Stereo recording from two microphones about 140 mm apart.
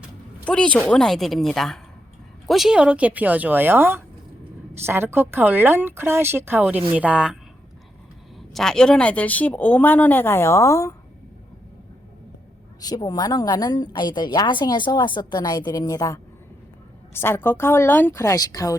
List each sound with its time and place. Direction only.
0.4 s a woman's voice: 5° left (ahead or behind); by 7.3 s 10° right (ahead or behind)
8.5 s speech: 5° left (ahead or behind); by 10.9 s 20° left (ahead or behind)
12.8 s a woman's voice: 25° left (ahead or behind)